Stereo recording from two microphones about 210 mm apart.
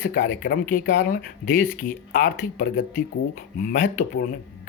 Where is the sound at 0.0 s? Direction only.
45° left (ahead or behind).